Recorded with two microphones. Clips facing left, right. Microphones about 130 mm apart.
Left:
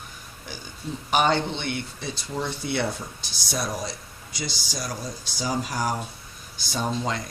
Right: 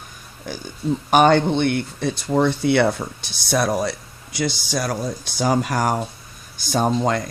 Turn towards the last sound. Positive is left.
turn(degrees=-50)  # may be behind; listen again after turning